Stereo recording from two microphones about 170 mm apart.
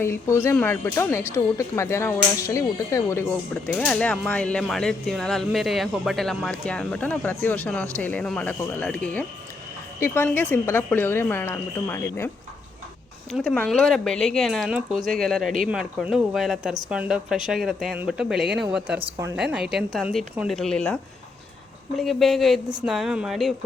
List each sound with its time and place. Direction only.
0.0 s speech: 15° left (ahead or behind)
13.3 s speech: 5° left (ahead or behind)